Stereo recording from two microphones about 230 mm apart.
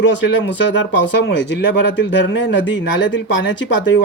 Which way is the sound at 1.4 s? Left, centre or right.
Left.